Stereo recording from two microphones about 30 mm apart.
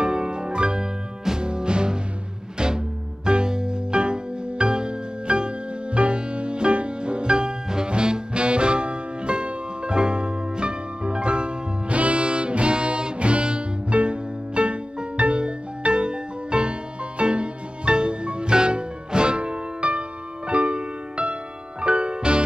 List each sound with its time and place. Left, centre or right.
0.0 s music: right
3.3 s music: right